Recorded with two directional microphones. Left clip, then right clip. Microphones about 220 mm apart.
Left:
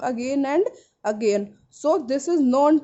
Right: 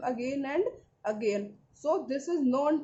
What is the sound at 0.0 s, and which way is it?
A woman's voice, 50° left (ahead or behind).